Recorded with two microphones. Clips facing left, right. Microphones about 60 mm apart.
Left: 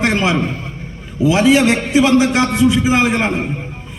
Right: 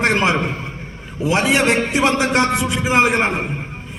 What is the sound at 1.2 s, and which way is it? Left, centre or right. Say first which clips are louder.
Speech: left 4 dB; right.